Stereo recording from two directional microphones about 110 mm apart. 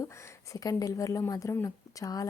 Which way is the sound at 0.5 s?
30° left (ahead or behind).